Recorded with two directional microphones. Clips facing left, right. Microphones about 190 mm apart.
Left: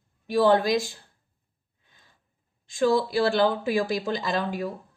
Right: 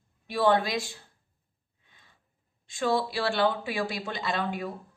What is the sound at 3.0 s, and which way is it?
A woman's voice, 40° left (ahead or behind).